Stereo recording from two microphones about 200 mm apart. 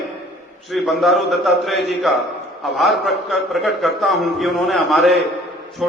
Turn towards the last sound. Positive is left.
turn(degrees=0)  # may be behind; listen again after turning